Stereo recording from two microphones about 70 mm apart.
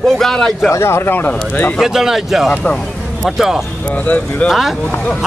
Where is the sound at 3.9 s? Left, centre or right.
Left.